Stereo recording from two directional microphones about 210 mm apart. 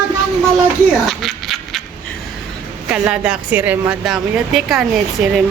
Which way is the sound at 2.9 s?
5° right (ahead or behind).